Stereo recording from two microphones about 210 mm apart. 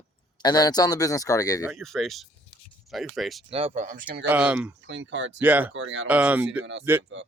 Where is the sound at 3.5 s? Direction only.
25° right (ahead or behind).